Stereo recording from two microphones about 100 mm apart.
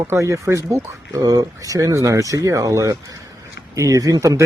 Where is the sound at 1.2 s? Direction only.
40° right (ahead or behind).